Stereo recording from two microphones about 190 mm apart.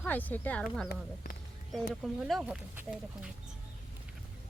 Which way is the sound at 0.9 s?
55° left (ahead or behind).